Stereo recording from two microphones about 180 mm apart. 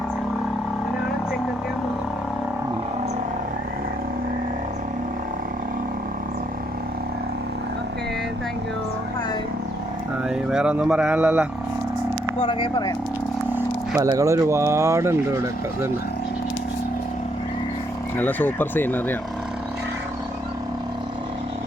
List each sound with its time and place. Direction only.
10.2 s speech: 5° right (ahead or behind)
12.5 s speech: 25° left (ahead or behind)
13.5 s speech: 15° right (ahead or behind)
18.2 s speech: 10° left (ahead or behind)